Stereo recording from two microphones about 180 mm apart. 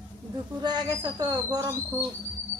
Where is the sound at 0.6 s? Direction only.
25° right (ahead or behind).